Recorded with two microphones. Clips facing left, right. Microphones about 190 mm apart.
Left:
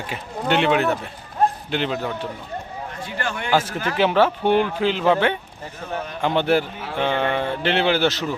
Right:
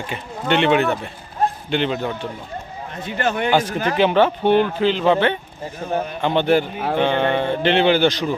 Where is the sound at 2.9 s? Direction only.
20° right (ahead or behind).